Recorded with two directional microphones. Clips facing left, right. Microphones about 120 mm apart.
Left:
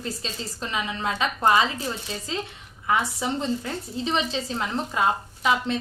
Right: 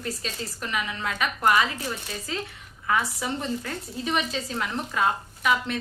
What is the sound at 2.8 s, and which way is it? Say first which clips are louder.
A woman's voice: left 2 dB; 20° left (ahead or behind).